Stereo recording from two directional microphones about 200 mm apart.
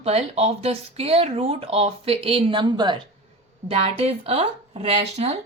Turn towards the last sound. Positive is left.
turn(degrees=-30)  # may be behind; listen again after turning